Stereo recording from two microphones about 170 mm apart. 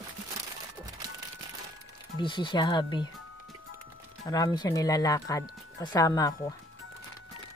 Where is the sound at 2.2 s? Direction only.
30° left (ahead or behind).